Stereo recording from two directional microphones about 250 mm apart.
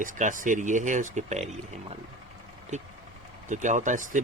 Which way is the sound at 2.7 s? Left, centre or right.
Right.